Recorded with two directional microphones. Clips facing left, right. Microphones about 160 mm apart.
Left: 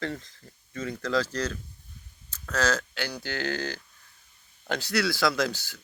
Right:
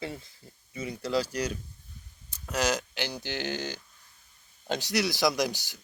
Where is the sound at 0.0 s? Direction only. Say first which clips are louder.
Left 4 dB; 10° right (ahead or behind).